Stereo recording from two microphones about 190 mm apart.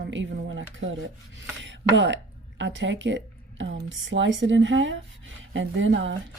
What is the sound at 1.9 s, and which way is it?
Speech, 75° right (ahead or behind).